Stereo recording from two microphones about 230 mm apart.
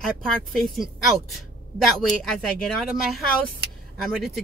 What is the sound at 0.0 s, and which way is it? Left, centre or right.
A woman's voice, centre.